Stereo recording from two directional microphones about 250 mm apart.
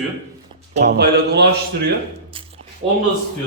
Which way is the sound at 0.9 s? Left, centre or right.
Right.